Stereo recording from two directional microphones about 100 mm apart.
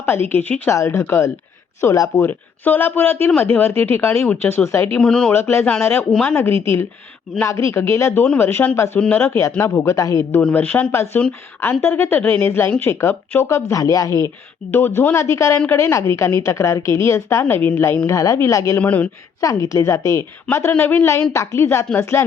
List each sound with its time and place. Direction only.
0.0 s a woman's voice: 25° left (ahead or behind)
0.8 s a woman's voice: 30° left (ahead or behind)
4.9 s speech: 5° left (ahead or behind)
5.3 s a woman's voice: 25° left (ahead or behind)
10.4 s a woman's voice: 20° left (ahead or behind); by 14.3 s 35° left (ahead or behind)
14.7 s a woman's voice: 20° left (ahead or behind)
17.5 s a woman's voice: 15° left (ahead or behind)
18.0 s a woman's voice: 35° left (ahead or behind)
18.8 s a woman's voice: 15° left (ahead or behind)
19.4 s a woman's voice: 35° left (ahead or behind)
20.7 s a woman's voice: 20° left (ahead or behind)